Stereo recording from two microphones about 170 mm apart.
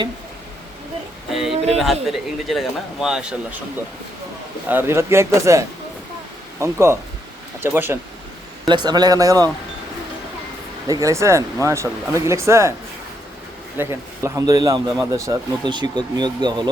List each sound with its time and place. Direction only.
1.3 s a man's voice: centre (ahead or behind)
4.7 s speech: 15° right (ahead or behind)
8.6 s speech: 25° right (ahead or behind)
10.8 s speech: 20° right (ahead or behind)
13.7 s speech: 15° right (ahead or behind)